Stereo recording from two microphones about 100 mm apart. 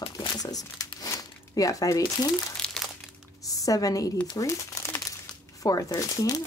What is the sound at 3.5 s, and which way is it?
A woman's voice, 35° left (ahead or behind).